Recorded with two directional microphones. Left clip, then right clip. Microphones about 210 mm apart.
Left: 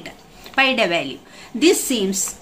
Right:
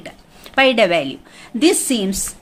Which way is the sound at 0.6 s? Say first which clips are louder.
Right 4 dB; 50° right (ahead or behind).